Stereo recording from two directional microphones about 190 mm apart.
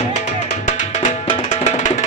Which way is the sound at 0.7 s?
40° left (ahead or behind).